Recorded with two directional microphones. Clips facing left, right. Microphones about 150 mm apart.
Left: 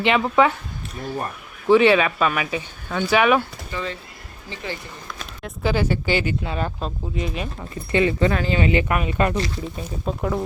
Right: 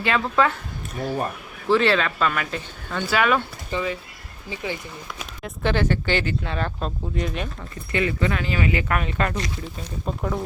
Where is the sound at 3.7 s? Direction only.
25° right (ahead or behind).